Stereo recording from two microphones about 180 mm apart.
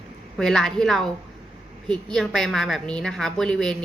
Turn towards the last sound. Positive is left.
turn(degrees=5)  # may be behind; listen again after turning